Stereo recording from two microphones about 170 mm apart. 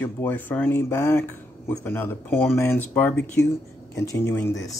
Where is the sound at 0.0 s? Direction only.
10° left (ahead or behind).